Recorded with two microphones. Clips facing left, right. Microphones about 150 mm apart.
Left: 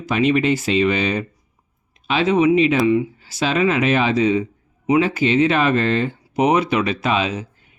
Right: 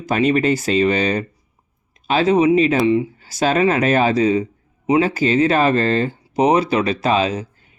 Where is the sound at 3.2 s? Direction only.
45° right (ahead or behind).